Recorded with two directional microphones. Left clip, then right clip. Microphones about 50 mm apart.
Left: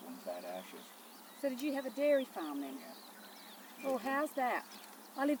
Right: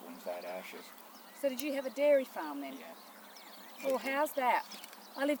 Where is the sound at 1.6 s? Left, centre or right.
Right.